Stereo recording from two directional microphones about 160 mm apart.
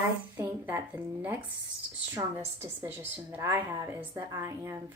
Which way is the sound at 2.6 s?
15° right (ahead or behind).